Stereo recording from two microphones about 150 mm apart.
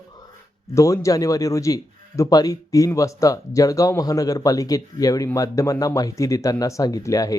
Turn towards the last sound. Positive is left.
turn(degrees=25)  # may be behind; listen again after turning